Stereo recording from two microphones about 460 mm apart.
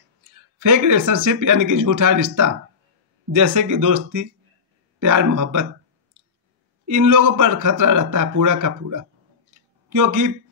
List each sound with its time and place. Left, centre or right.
0.6 s speech: right
6.9 s speech: right